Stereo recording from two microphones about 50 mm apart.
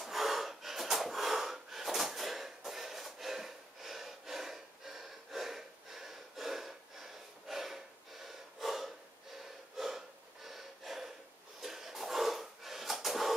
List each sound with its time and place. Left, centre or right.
0.0 s gasp: centre
9.8 s snort: centre
11.6 s a sound: centre